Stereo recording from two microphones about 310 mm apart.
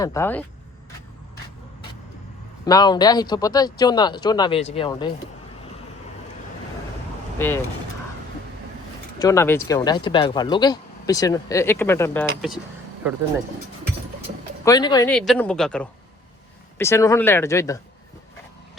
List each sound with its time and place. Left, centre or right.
0.0 s speech: centre
2.6 s speech: centre
7.3 s speech: centre
9.1 s speech: centre
14.6 s speech: centre